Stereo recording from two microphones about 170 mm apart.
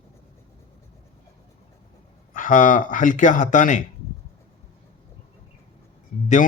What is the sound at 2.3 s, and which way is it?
Speech, 50° left (ahead or behind).